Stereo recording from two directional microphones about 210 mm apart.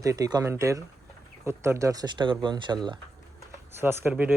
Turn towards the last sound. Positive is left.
turn(degrees=-10)  # may be behind; listen again after turning